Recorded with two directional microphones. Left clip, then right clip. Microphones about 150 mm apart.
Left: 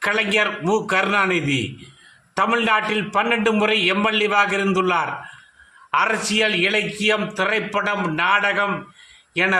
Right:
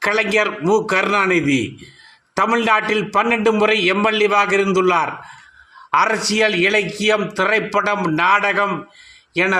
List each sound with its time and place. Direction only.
0.0 s a man's voice: 25° right (ahead or behind)